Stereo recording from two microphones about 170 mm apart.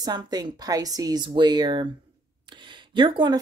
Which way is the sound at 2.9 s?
30° right (ahead or behind).